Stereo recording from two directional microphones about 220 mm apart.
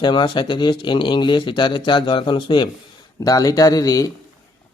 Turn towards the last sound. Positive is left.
turn(degrees=15)  # may be behind; listen again after turning